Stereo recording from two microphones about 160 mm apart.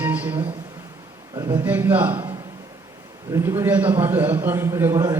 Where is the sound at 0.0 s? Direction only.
10° right (ahead or behind).